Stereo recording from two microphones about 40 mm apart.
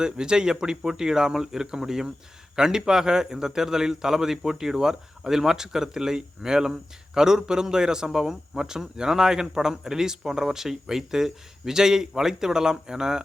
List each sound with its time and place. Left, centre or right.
0.0 s a man's voice: centre